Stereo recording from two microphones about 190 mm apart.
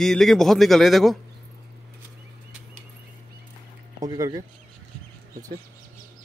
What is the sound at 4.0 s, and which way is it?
Speech, 20° right (ahead or behind).